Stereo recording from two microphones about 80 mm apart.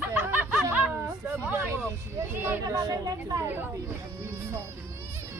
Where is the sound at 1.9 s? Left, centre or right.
Right.